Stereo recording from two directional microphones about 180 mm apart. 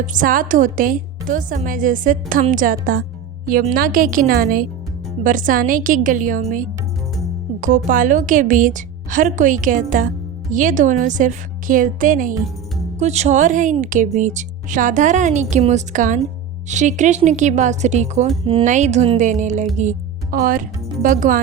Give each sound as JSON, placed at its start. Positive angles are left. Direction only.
{"t": 0.0, "sound": "a woman's voice", "side_deg": -45}
{"t": 7.9, "sound": "a woman's voice", "side_deg": -50}